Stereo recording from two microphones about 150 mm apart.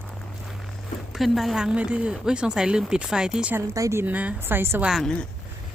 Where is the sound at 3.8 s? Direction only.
20° right (ahead or behind).